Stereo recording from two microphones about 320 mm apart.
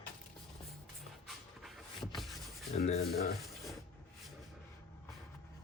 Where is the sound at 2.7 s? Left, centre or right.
Centre.